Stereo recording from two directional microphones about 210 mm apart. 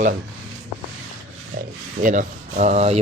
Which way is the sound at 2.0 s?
40° right (ahead or behind).